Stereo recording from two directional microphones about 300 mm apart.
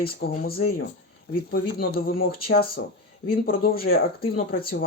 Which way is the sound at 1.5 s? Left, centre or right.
Left.